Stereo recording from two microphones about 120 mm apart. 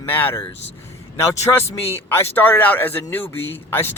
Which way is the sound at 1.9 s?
15° left (ahead or behind).